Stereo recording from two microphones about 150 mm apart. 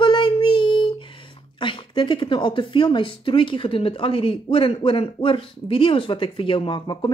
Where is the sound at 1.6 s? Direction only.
35° left (ahead or behind).